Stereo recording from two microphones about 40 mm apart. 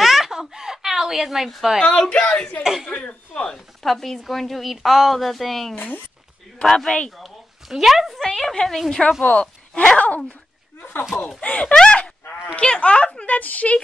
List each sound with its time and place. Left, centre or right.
0.0 s a sound: centre
1.8 s speech: centre
3.5 s a woman's voice: centre
5.8 s speech: left
6.6 s a man's voice: centre
7.2 s a sound: centre
8.2 s a woman's voice: centre
9.2 s speech: left
10.8 s speech: left
11.4 s speech: left
13.3 s speech: left